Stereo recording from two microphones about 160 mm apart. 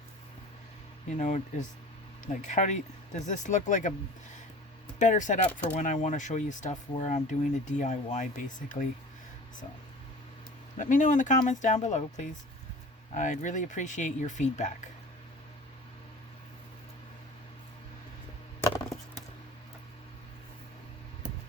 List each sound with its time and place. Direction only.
1.2 s speech: 45° left (ahead or behind)
4.9 s speech: 50° left (ahead or behind)
10.8 s speech: 55° left (ahead or behind)